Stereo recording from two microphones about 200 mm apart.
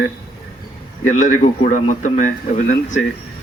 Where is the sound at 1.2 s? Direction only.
40° left (ahead or behind).